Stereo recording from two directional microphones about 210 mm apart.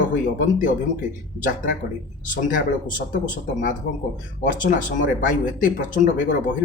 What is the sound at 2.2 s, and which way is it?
Speech, 40° left (ahead or behind).